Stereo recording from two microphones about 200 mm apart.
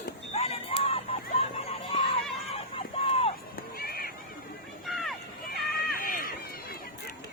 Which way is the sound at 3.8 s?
50° left (ahead or behind).